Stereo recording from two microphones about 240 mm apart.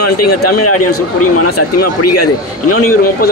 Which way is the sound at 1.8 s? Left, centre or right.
Left.